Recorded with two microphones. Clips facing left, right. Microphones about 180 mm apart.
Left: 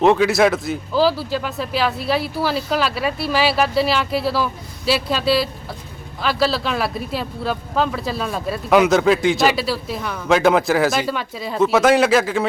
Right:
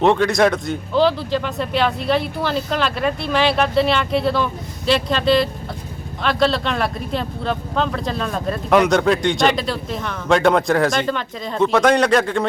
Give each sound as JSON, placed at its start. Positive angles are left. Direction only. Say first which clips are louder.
{"t": 0.0, "sound": "speech", "louder": "left 1 dB", "side_deg": 5}